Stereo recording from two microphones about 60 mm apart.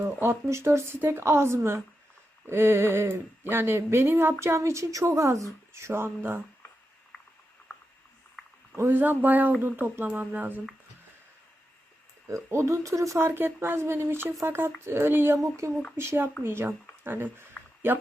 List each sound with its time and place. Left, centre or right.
0.0 s speech: right
8.7 s speech: right
12.3 s speech: right
13.1 s speech: right
15.4 s speech: right
16.0 s speech: right